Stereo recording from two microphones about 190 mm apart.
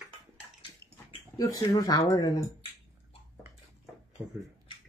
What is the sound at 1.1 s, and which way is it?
Speech, 20° left (ahead or behind).